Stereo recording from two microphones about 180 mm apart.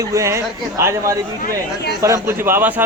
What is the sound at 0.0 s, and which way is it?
A man's voice, 15° right (ahead or behind).